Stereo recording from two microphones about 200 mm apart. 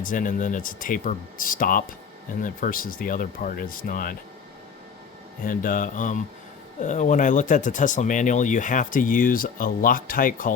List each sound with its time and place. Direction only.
0.0 s speech: 40° left (ahead or behind)
5.5 s speech: 45° left (ahead or behind)